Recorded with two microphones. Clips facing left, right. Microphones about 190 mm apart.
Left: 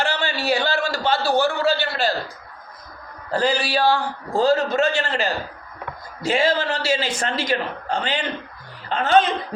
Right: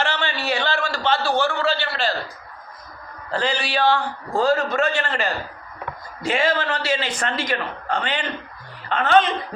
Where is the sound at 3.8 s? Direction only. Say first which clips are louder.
Right 3 dB; 10° left (ahead or behind).